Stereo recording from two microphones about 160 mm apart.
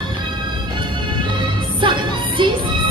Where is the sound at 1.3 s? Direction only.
30° right (ahead or behind).